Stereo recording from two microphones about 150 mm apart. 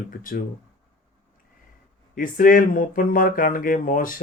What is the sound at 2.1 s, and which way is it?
Speech, 65° left (ahead or behind).